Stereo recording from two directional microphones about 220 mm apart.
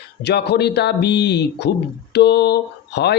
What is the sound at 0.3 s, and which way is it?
A man's voice, 50° left (ahead or behind).